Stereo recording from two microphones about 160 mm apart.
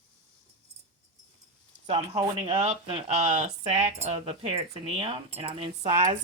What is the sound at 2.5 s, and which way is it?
Speech, 40° right (ahead or behind).